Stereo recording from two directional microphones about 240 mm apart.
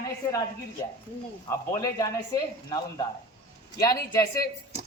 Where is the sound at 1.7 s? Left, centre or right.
Centre.